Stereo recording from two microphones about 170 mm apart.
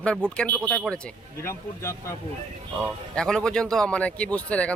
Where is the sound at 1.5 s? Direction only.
15° left (ahead or behind).